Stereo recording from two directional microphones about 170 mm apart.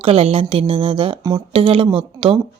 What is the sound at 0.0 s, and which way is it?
Speech, 35° right (ahead or behind).